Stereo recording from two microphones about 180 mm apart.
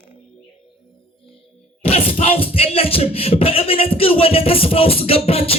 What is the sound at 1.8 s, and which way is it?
Speech, 35° left (ahead or behind).